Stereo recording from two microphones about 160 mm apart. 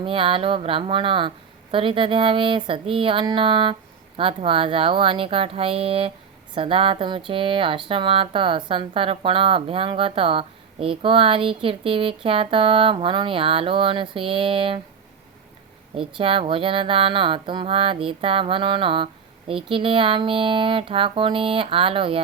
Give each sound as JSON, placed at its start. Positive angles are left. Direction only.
{"t": 0.0, "sound": "speech", "side_deg": -35}
{"t": 16.0, "sound": "speech", "side_deg": -35}